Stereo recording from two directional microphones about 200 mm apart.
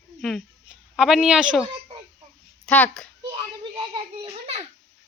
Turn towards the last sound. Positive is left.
turn(degrees=-25)  # may be behind; listen again after turning